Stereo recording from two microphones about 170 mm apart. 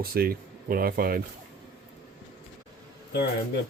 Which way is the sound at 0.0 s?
65° right (ahead or behind).